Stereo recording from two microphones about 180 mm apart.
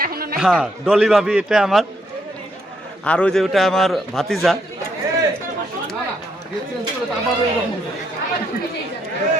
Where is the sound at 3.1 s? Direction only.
5° left (ahead or behind).